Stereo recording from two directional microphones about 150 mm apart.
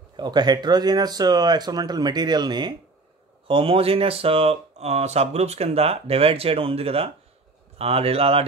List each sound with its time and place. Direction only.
0.2 s speech: 30° right (ahead or behind)